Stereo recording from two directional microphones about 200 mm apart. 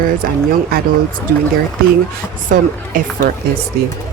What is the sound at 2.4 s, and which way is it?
Speech, 40° right (ahead or behind).